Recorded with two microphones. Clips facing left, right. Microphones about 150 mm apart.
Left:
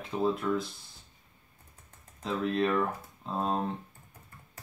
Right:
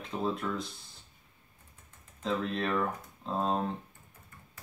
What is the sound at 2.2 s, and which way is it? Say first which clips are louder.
Speech: left 3 dB; centre (ahead or behind).